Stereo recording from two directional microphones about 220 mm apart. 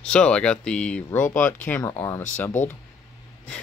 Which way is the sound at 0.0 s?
5° left (ahead or behind).